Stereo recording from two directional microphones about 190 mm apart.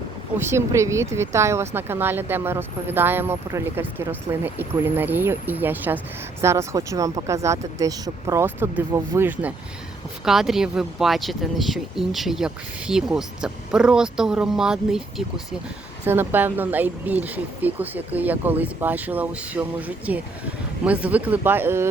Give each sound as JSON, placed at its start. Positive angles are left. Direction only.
{"t": 0.3, "sound": "speech", "side_deg": -15}
{"t": 16.0, "sound": "speech", "side_deg": -10}